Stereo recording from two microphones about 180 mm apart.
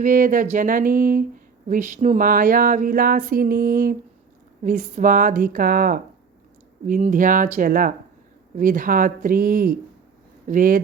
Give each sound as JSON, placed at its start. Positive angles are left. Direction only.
{"t": 0.0, "sound": "speech", "side_deg": -50}